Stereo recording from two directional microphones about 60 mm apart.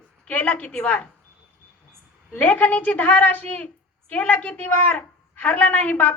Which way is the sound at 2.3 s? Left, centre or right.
Left.